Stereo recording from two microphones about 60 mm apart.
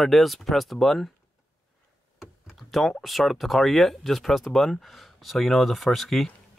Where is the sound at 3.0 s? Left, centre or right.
Centre.